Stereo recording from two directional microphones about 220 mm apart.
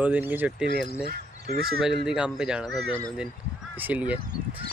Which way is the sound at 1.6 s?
Centre (ahead or behind).